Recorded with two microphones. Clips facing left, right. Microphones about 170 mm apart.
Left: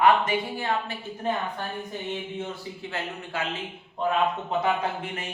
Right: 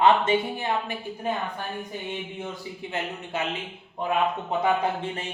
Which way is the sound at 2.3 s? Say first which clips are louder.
Left 1 dB; 15° right (ahead or behind).